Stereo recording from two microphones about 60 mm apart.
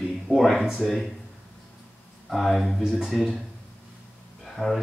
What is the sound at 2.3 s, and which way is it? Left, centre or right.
Speech, centre.